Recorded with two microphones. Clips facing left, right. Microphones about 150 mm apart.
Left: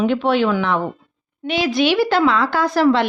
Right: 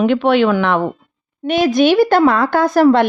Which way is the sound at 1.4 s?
50° right (ahead or behind).